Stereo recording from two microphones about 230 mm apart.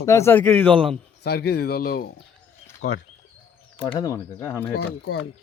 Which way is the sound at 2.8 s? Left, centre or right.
Left.